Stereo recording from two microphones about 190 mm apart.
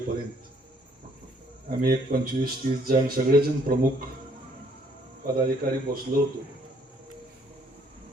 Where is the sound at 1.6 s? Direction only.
50° right (ahead or behind).